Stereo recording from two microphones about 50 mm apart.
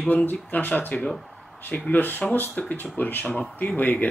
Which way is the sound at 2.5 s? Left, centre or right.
Left.